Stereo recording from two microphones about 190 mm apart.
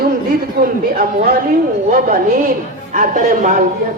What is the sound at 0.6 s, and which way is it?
Speech, 60° right (ahead or behind).